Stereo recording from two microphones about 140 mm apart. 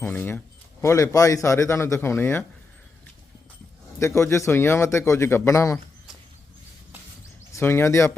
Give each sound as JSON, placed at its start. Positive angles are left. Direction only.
{"t": 0.0, "sound": "a man's voice", "side_deg": 15}
{"t": 4.0, "sound": "a man's voice", "side_deg": 20}
{"t": 7.5, "sound": "speech", "side_deg": 15}